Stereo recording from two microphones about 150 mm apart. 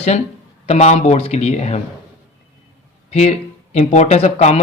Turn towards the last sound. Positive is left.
turn(degrees=45)  # may be behind; listen again after turning